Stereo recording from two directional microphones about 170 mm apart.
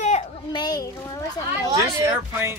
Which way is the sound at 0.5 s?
25° left (ahead or behind).